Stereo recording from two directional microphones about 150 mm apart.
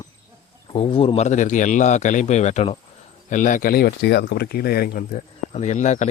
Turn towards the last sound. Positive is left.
turn(degrees=50)  # may be behind; listen again after turning